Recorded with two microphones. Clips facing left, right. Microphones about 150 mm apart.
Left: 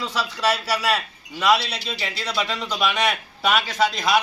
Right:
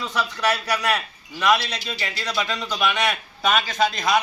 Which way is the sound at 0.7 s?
10° left (ahead or behind).